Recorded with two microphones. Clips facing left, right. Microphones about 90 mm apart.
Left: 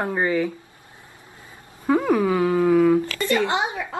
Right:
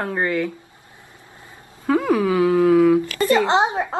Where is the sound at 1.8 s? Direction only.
5° left (ahead or behind).